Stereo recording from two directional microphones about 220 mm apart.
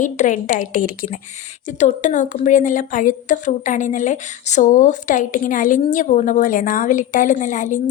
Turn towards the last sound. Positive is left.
turn(degrees=35)  # may be behind; listen again after turning